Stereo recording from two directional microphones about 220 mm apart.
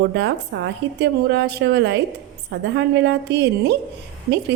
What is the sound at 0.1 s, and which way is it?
A woman's voice, 50° right (ahead or behind).